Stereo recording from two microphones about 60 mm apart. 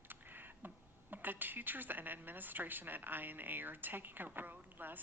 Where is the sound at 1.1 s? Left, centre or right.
Right.